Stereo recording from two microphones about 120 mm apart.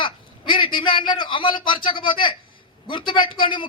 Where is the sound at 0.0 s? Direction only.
45° left (ahead or behind).